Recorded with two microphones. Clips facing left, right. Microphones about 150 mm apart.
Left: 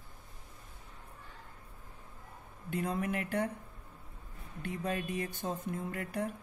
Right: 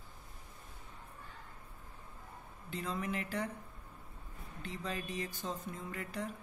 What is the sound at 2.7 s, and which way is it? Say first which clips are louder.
Speech: left 4 dB; 55° left (ahead or behind).